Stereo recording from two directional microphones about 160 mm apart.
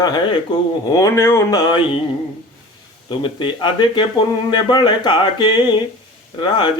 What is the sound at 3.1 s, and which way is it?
Speech, 30° left (ahead or behind).